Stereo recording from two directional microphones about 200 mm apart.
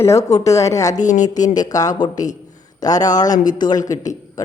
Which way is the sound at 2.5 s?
20° left (ahead or behind).